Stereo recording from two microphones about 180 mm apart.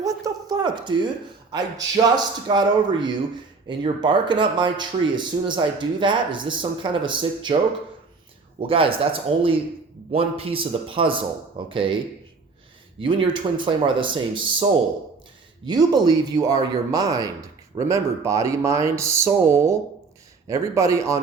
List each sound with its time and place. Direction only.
0.0 s a sound: 20° right (ahead or behind)
2.1 s speech: 25° right (ahead or behind)
8.5 s speech: 30° right (ahead or behind)
13.0 s speech: 30° right (ahead or behind)